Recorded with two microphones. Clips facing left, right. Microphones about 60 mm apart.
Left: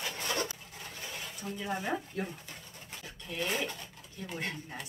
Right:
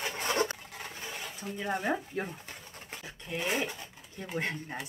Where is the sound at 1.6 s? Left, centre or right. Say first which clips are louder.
Right 3 dB; right.